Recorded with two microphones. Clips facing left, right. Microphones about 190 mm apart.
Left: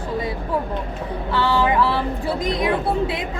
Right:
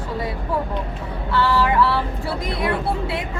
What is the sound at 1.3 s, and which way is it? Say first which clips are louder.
Speech: even; 20° left (ahead or behind).